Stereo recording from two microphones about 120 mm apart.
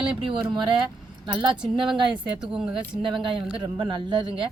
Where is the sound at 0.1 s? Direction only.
45° right (ahead or behind).